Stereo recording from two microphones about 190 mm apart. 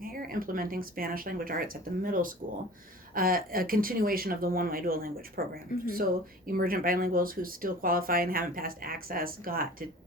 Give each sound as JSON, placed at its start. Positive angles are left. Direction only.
{"t": 0.0, "sound": "speech", "side_deg": -50}